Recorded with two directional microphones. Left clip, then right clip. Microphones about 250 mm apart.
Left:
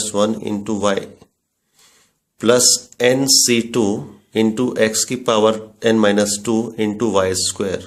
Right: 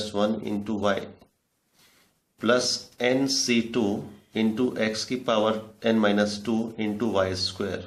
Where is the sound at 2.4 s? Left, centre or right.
Left.